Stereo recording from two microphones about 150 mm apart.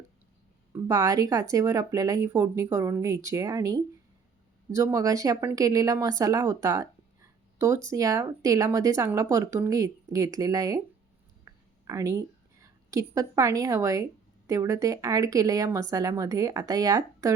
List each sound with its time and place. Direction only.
0.7 s a woman's voice: 25° right (ahead or behind)